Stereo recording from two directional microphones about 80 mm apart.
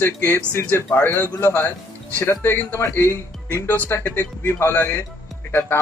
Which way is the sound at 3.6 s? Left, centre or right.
Left.